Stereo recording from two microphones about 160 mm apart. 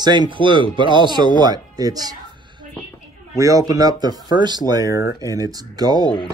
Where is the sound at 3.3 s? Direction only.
20° right (ahead or behind).